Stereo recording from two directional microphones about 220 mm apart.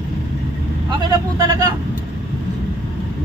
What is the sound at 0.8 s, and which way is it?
Speech, 20° right (ahead or behind).